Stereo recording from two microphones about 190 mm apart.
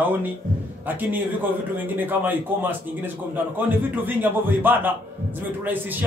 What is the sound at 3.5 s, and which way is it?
A man's voice, 10° right (ahead or behind).